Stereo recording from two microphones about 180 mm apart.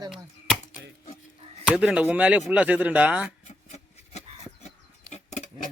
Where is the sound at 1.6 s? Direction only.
5° right (ahead or behind).